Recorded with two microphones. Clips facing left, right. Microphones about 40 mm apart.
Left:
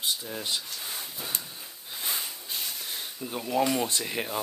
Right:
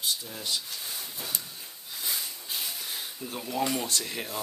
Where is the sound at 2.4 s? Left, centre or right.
Centre.